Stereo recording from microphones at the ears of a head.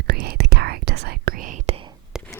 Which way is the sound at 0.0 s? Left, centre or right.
Right.